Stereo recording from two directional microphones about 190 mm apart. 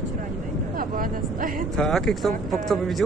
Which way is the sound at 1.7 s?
Centre (ahead or behind).